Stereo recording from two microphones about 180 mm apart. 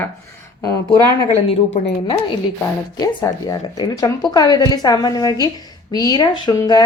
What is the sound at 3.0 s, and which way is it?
A woman's voice, 20° left (ahead or behind).